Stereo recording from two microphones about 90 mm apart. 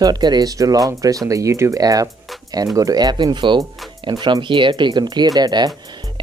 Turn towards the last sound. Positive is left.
turn(degrees=-45)  # may be behind; listen again after turning